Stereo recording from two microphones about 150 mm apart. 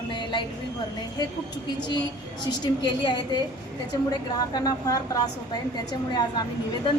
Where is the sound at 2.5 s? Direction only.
30° left (ahead or behind).